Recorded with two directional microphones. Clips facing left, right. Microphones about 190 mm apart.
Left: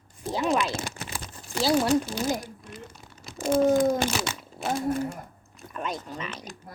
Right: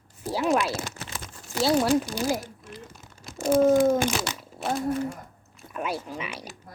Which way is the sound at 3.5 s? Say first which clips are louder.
Right 2 dB; 5° right (ahead or behind).